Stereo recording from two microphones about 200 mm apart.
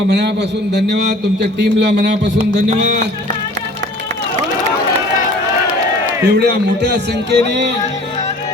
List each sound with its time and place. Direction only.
0.7 s music: 60° right (ahead or behind)
6.2 s music: 55° right (ahead or behind)